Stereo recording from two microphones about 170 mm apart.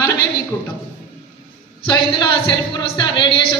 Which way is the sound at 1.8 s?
25° left (ahead or behind).